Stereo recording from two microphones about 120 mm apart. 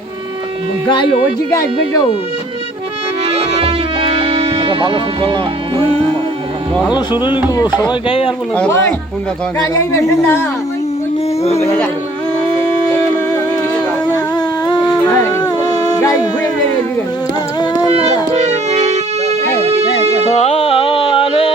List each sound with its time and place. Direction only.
3.2 s music: 55° right (ahead or behind)
7.1 s speech: 35° left (ahead or behind)
7.9 s speech: 45° left (ahead or behind)
8.5 s speech: 10° left (ahead or behind)
9.7 s speech: 25° left (ahead or behind)
14.3 s music: 35° left (ahead or behind)
15.1 s music: 25° left (ahead or behind)
16.0 s a sound: 30° left (ahead or behind)
17.9 s music: 70° right (ahead or behind)
20.3 s music: 65° left (ahead or behind)